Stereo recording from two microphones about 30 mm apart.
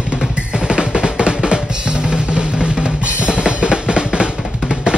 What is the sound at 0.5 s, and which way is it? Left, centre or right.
Drum, right.